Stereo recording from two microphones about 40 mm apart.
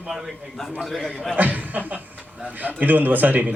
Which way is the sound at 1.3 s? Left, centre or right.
Right.